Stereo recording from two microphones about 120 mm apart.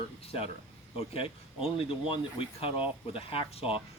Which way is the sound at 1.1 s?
50° left (ahead or behind).